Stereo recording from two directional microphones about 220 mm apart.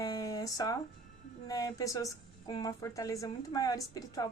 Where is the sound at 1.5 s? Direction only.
15° left (ahead or behind).